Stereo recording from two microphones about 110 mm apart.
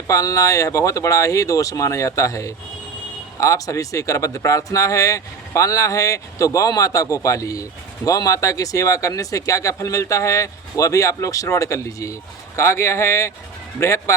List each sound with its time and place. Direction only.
0.1 s speech: 30° left (ahead or behind)